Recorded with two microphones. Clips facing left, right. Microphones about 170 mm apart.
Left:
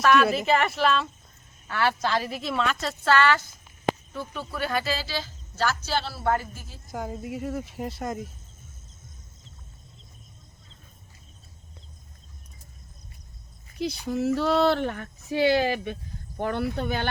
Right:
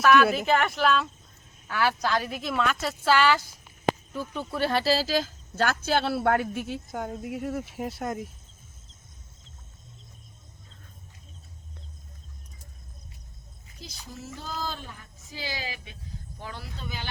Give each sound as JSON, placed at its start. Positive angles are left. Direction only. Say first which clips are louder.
{"t": 0.0, "sound": "a woman's voice", "louder": "even", "side_deg": 0}
{"t": 4.4, "sound": "speech", "louder": "right 2 dB", "side_deg": -30}
{"t": 6.8, "sound": "a woman's voice", "louder": "even", "side_deg": 0}
{"t": 13.7, "sound": "speech", "louder": "left 16 dB", "side_deg": 65}